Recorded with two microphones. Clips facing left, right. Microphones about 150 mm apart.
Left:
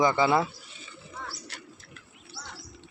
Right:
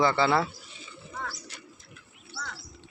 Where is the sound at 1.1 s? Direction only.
50° right (ahead or behind).